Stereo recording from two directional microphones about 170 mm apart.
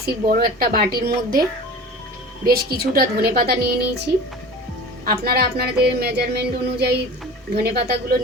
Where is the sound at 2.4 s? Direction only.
65° right (ahead or behind).